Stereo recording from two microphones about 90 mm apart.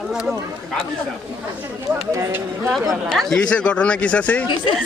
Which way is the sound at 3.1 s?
5° left (ahead or behind).